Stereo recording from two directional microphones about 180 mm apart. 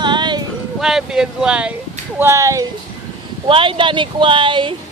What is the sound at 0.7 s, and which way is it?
Speech, centre (ahead or behind).